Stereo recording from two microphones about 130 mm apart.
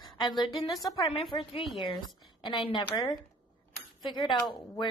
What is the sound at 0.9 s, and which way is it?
A woman's voice, 40° left (ahead or behind).